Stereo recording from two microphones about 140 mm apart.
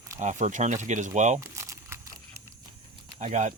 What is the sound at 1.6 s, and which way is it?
Crumpling, 20° right (ahead or behind).